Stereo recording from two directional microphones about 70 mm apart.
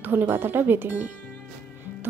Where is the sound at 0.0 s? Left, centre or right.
Right.